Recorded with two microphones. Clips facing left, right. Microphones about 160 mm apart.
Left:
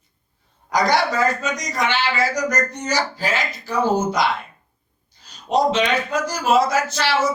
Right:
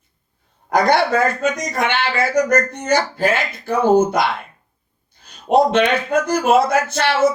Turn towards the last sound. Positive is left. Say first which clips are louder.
# right 3 dB
turn(degrees=-55)  # may be behind; listen again after turning